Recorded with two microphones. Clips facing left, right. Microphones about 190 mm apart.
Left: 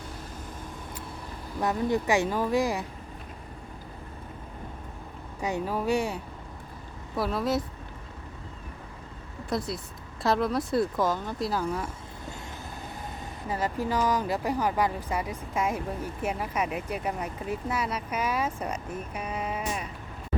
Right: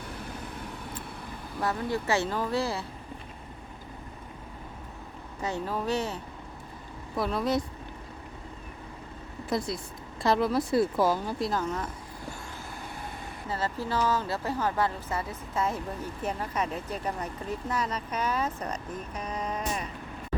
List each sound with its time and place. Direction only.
1.6 s speech: 15° left (ahead or behind)
5.4 s speech: 15° left (ahead or behind)
7.2 s speech: centre (ahead or behind)
9.5 s speech: centre (ahead or behind)
13.5 s speech: 15° left (ahead or behind)